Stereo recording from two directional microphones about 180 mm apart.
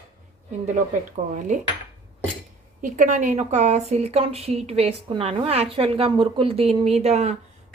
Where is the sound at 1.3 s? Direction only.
45° right (ahead or behind).